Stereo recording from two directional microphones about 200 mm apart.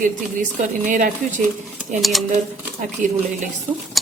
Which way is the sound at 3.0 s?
40° right (ahead or behind).